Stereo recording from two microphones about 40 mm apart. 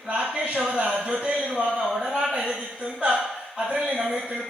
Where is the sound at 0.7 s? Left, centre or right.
Right.